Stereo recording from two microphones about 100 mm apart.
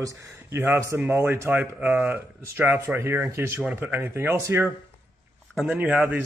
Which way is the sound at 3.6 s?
15° right (ahead or behind).